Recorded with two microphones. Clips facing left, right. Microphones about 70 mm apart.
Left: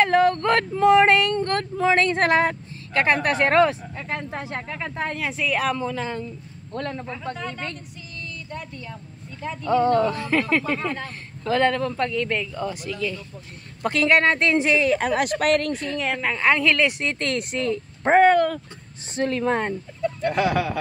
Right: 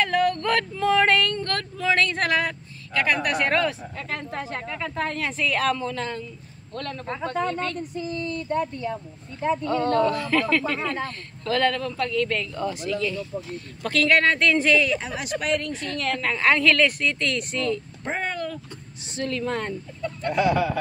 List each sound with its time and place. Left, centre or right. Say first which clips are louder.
0.0 s speech: left 4 dB; left
3.9 s speech: left 1 dB; centre
7.9 s a sound: right 9 dB; right
9.4 s speech: right 8 dB; right
9.7 s speech: left 5 dB; centre
12.1 s speech: even; centre
12.5 s speech: right 2 dB; centre
13.8 s speech: left 1 dB; left
15.0 s speech: left 7 dB; left
15.9 s speech: right 3 dB; centre
17.0 s speech: even; left
18.0 s speech: left 14 dB; left
19.1 s speech: left 5 dB; left